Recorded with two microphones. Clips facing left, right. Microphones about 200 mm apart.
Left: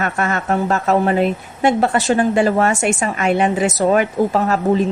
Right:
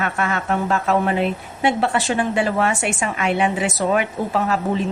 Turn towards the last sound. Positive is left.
turn(degrees=45)  # may be behind; listen again after turning